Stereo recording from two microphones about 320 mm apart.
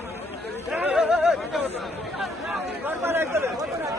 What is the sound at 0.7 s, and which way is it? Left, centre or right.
Speech, centre.